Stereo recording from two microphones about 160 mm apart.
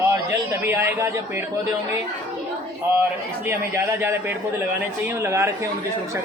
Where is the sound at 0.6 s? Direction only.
15° right (ahead or behind).